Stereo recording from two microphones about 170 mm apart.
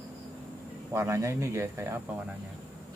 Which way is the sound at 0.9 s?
15° right (ahead or behind).